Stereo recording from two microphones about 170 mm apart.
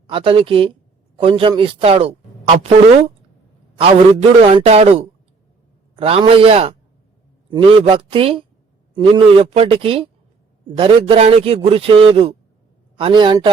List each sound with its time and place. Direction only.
0.1 s a man's voice: 30° right (ahead or behind)